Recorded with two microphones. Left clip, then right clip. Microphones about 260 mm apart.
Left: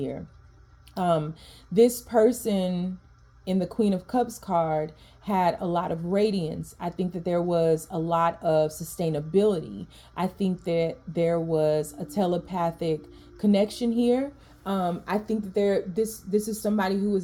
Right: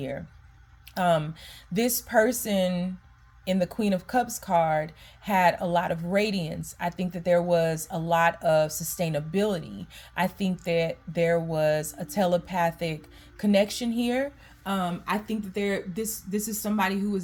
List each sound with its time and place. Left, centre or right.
0.9 s a woman's voice: right